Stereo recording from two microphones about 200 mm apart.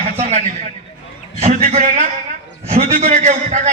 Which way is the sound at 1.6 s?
40° right (ahead or behind).